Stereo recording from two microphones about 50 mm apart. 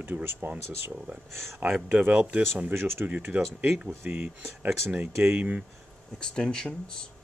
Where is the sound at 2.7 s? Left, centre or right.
Right.